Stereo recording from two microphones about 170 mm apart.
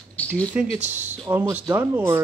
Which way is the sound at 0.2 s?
10° left (ahead or behind).